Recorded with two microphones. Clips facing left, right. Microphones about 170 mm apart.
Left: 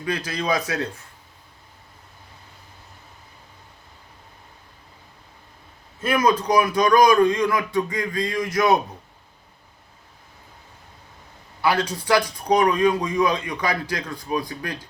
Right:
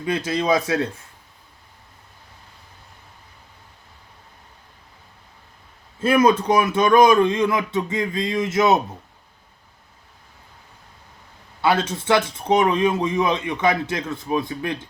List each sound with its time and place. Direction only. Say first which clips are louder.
0.0 s speech: right 4 dB; 25° right (ahead or behind)
6.0 s speech: right 4 dB; 30° right (ahead or behind)
11.6 s speech: right 2 dB; 25° right (ahead or behind)